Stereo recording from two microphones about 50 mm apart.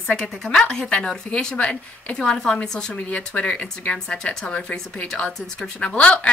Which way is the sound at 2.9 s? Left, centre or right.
Left.